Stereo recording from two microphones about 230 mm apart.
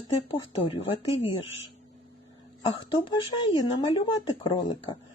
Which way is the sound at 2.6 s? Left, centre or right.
Centre.